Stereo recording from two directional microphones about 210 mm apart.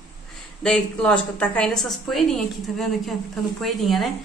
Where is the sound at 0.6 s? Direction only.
5° left (ahead or behind).